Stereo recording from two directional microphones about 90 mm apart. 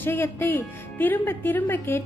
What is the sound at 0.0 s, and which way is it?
Speech, 25° left (ahead or behind).